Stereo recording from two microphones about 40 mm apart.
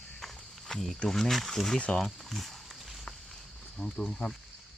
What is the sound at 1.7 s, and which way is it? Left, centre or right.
Speech, left.